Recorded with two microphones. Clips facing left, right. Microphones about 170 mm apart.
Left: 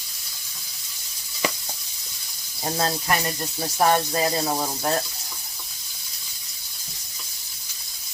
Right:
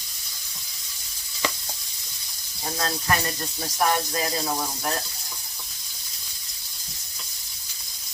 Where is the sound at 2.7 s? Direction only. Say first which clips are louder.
Left 2 dB; 30° left (ahead or behind).